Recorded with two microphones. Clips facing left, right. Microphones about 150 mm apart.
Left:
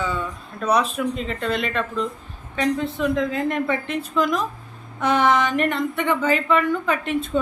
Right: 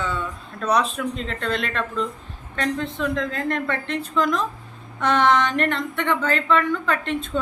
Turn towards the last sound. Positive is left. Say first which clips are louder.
# left 1 dB
turn(degrees=10)  # may be behind; listen again after turning